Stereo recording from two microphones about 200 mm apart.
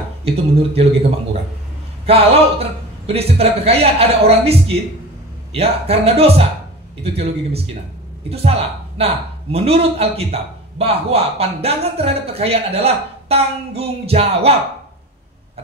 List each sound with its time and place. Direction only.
0.2 s speech: 30° right (ahead or behind)
2.1 s speech: 30° right (ahead or behind)